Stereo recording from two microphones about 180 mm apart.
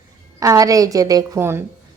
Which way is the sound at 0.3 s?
20° right (ahead or behind).